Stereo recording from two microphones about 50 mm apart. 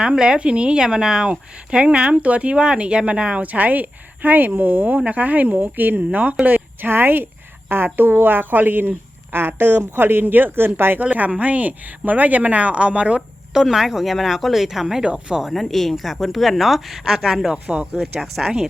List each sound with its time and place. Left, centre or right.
0.0 s a woman's voice: centre; by 6.1 s right
6.1 s a woman's voice: right
6.4 s a woman's voice: right
11.0 s a woman's voice: right
13.5 s a woman's voice: centre
15.4 s speech: centre
17.5 s speech: centre
18.0 s speech: centre